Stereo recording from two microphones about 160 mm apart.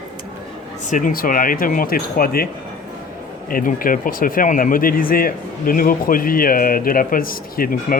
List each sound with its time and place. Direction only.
0.9 s speech: 55° left (ahead or behind)
3.5 s speech: 60° left (ahead or behind)